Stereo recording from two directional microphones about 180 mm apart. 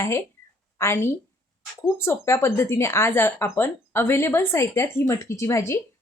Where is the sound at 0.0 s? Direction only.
15° left (ahead or behind).